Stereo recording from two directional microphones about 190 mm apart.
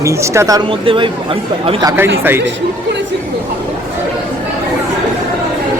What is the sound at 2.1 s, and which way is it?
Speech, 10° right (ahead or behind).